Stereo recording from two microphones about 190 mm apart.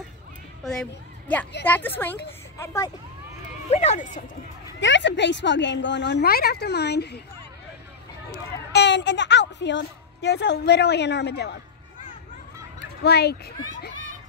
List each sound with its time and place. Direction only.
1.6 s a woman's voice: 10° left (ahead or behind)
3.7 s speech: 35° left (ahead or behind)
4.7 s speech: 70° left (ahead or behind)
8.7 s a woman's voice: 70° left (ahead or behind)
13.0 s speech: 60° left (ahead or behind)